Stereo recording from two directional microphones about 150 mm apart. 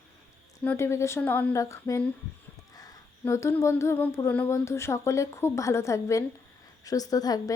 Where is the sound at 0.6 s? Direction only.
15° left (ahead or behind).